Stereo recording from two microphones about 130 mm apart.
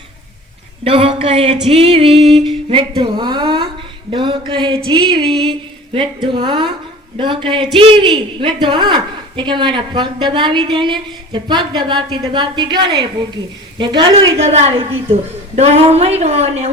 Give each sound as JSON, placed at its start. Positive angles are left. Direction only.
{"t": 0.9, "sound": "female singing", "side_deg": -45}
{"t": 2.9, "sound": "a woman's voice", "side_deg": -35}
{"t": 14.1, "sound": "female singing", "side_deg": -50}
{"t": 15.5, "sound": "speech", "side_deg": -55}